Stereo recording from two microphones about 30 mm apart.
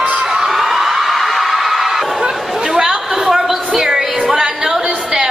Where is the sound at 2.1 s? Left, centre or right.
Right.